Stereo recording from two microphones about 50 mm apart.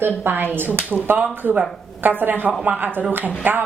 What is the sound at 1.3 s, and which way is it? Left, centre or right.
A woman's voice, right.